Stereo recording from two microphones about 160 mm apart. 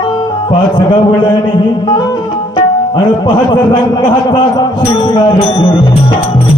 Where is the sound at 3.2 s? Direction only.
30° left (ahead or behind).